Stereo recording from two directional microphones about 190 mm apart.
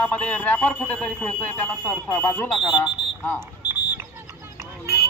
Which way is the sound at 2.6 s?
25° left (ahead or behind).